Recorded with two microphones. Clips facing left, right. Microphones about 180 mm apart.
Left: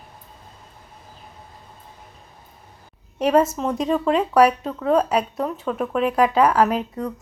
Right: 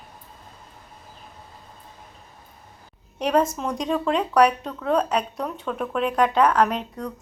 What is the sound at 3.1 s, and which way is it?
Speech, 5° left (ahead or behind).